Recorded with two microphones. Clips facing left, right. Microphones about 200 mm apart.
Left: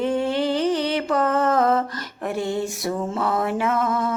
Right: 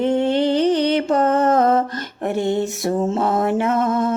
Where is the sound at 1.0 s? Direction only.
20° right (ahead or behind).